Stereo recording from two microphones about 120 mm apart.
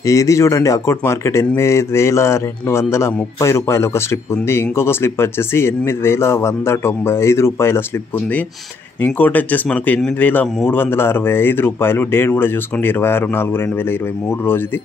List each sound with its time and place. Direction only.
0.0 s speech: 25° left (ahead or behind)
9.0 s speech: 15° left (ahead or behind)